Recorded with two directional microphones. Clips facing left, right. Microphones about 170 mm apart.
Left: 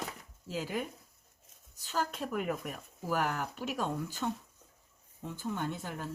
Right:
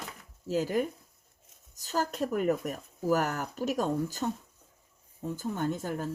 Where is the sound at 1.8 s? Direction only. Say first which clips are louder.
Right 5 dB; 40° right (ahead or behind).